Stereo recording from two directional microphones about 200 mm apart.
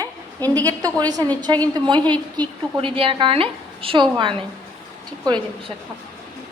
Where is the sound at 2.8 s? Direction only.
25° right (ahead or behind).